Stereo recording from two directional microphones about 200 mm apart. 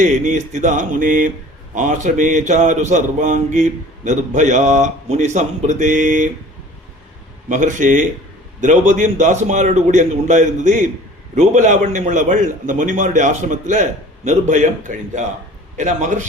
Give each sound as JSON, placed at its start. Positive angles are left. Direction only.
{"t": 0.0, "sound": "speech", "side_deg": -35}
{"t": 7.4, "sound": "speech", "side_deg": -40}